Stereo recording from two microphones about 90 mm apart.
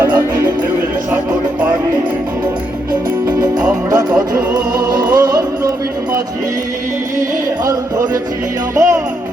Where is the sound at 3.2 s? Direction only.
50° right (ahead or behind).